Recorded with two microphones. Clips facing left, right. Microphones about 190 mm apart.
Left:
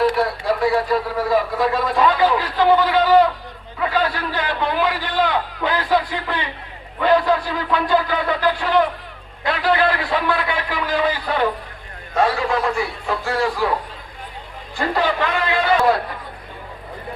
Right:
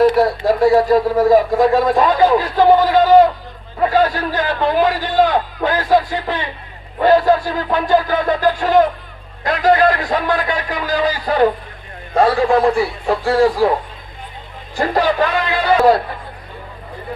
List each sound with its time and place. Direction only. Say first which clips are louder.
0.0 s speech: right 6 dB; 45° right (ahead or behind)
14.8 s speech: right 4 dB; 40° right (ahead or behind)